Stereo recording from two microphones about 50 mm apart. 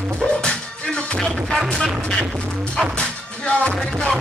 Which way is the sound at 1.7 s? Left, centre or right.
Centre.